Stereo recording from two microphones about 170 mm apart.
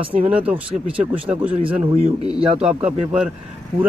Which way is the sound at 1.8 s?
35° right (ahead or behind).